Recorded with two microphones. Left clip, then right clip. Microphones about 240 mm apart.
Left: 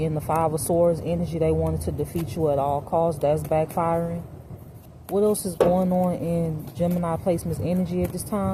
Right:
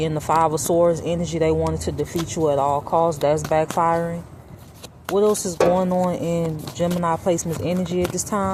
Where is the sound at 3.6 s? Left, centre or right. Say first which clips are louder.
Right 5 dB; right.